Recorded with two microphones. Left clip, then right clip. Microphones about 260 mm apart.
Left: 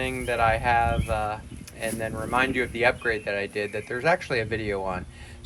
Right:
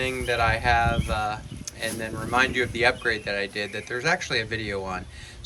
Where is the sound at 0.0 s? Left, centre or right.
Centre.